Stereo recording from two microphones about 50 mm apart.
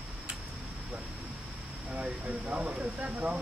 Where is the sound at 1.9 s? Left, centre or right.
Right.